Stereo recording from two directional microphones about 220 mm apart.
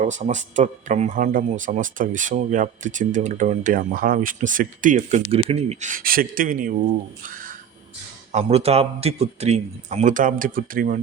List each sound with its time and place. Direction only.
0.0 s speech: 35° right (ahead or behind)